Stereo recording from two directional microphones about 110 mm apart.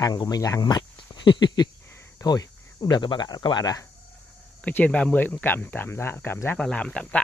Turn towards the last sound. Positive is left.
turn(degrees=10)  # may be behind; listen again after turning